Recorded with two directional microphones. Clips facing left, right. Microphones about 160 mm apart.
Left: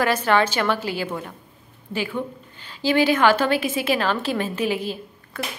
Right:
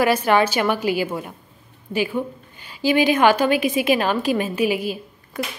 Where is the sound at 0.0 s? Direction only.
10° right (ahead or behind).